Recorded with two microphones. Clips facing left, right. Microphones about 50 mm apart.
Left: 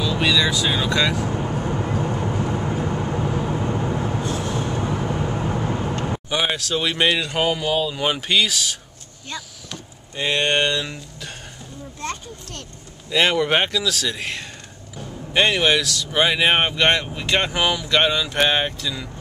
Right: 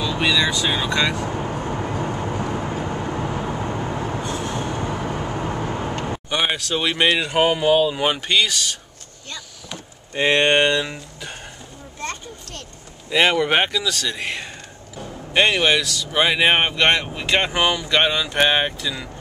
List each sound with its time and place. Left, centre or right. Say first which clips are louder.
0.0 s speech: even; centre
1.3 s vehicle: left 1 dB; centre
5.7 s vehicle: left 1 dB; right
6.0 s speech: right 1 dB; centre; by 7.9 s right
7.9 s speech: right 1 dB; centre
10.1 s speech: right 4 dB; right; by 11.3 s centre
13.1 s speech: right 1 dB; centre